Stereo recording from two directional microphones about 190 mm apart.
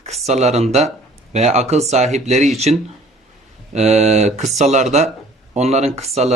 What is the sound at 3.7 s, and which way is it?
Speech, 35° right (ahead or behind).